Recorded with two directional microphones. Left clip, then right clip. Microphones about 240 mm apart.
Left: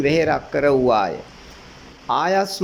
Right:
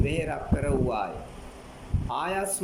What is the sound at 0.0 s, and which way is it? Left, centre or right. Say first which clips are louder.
Speech: left 12 dB; left.